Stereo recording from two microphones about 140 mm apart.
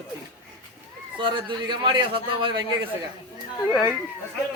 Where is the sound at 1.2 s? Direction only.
35° right (ahead or behind).